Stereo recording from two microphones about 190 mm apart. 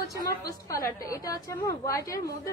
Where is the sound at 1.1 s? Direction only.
20° left (ahead or behind).